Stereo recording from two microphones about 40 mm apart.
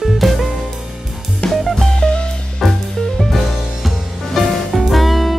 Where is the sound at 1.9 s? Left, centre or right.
Left.